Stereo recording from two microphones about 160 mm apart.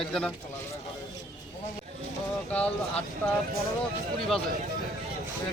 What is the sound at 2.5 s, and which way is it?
Speech, 5° left (ahead or behind).